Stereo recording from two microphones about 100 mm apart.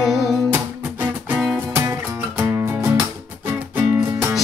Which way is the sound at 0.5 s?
20° right (ahead or behind).